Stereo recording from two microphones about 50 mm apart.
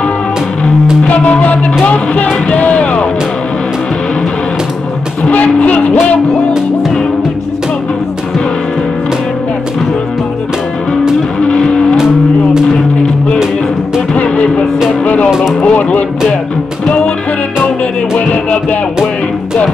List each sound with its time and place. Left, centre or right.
1.0 s speech: left
5.2 s speech: left
11.3 s vehicle: centre
14.1 s music: left
15.6 s speech: left
18.2 s music: left